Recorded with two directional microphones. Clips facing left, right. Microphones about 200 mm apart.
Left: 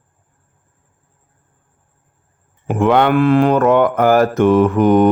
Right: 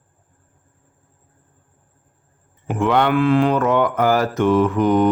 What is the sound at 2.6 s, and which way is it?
Speech, 55° left (ahead or behind).